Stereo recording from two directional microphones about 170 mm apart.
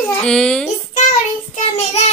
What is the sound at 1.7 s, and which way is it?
Child singing, 40° left (ahead or behind).